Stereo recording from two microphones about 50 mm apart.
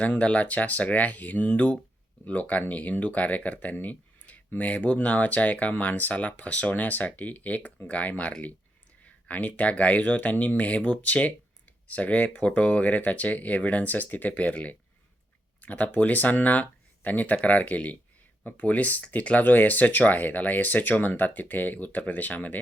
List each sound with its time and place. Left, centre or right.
0.0 s speech: left